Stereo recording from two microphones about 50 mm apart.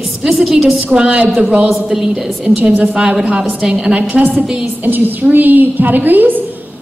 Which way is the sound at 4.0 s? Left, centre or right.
Right.